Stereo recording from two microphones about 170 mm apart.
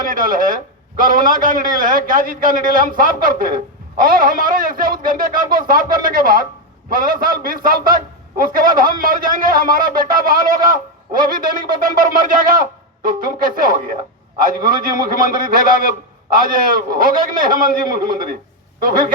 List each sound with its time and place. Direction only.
0.0 s a man's voice: 55° right (ahead or behind)